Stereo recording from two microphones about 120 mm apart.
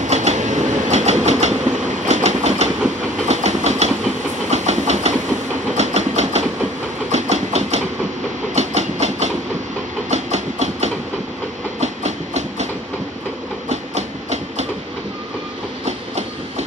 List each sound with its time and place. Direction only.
0.0 s train: 70° right (ahead or behind)
4.5 s engine: 70° right (ahead or behind)
8.5 s train: 65° right (ahead or behind)
13.7 s train: 65° right (ahead or behind)
15.8 s train: 65° right (ahead or behind)